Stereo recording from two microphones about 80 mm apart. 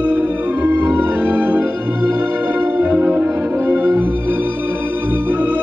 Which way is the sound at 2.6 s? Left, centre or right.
Right.